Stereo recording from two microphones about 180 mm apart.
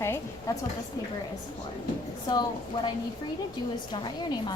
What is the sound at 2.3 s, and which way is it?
Speech, 20° left (ahead or behind).